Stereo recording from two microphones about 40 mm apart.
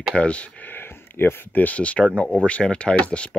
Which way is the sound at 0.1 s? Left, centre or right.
Left.